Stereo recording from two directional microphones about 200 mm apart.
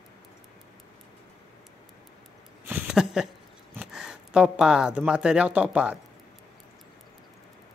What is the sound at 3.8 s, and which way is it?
Speech, 5° right (ahead or behind).